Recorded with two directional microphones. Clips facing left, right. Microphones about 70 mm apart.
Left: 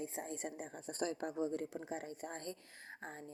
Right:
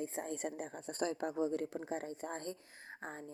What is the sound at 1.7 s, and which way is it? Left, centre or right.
A woman's voice, right.